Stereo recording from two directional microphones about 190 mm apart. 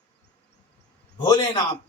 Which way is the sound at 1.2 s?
20° left (ahead or behind).